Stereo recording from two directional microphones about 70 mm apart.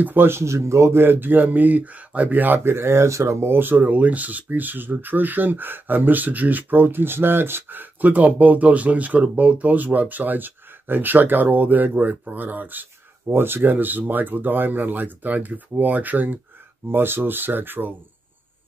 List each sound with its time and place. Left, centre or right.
0.0 s speech: right